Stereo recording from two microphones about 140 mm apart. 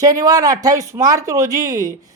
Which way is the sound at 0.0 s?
25° right (ahead or behind).